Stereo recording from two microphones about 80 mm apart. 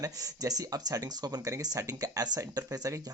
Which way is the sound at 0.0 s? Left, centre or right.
Right.